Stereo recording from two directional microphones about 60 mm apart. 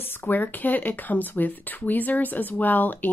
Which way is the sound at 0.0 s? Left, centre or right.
Left.